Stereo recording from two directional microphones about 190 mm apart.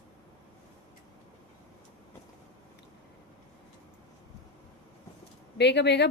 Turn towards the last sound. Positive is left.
turn(degrees=65)  # may be behind; listen again after turning